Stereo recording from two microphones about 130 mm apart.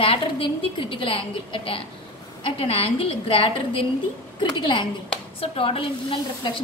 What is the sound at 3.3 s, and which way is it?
Speech, 45° left (ahead or behind).